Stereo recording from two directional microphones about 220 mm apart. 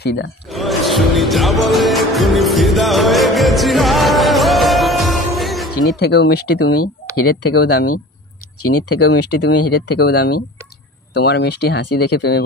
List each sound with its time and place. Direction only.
0.0 s speech: 50° left (ahead or behind)
0.5 s music: centre (ahead or behind)
5.9 s speech: 50° left (ahead or behind)
8.6 s speech: 90° left
9.4 s speech: 50° left (ahead or behind)